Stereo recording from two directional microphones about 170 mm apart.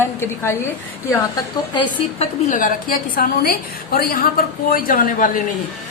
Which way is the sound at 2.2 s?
50° left (ahead or behind).